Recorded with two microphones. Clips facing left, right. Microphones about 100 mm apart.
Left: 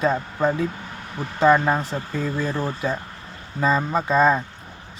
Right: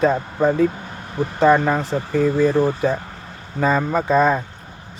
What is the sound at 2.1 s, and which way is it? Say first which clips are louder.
Speech: right 11 dB; 65° right (ahead or behind).